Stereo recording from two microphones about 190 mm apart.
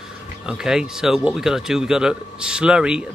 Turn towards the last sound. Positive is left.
turn(degrees=-5)  # may be behind; listen again after turning